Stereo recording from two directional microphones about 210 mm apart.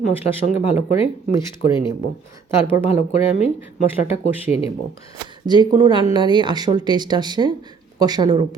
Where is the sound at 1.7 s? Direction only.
25° left (ahead or behind).